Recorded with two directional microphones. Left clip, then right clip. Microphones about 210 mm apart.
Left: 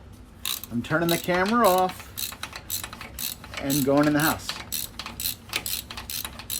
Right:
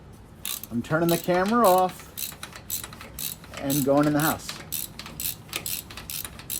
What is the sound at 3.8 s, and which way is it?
Speech, 5° right (ahead or behind).